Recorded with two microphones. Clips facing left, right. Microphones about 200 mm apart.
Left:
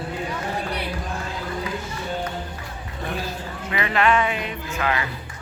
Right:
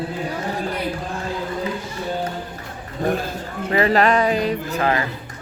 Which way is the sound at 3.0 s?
45° right (ahead or behind).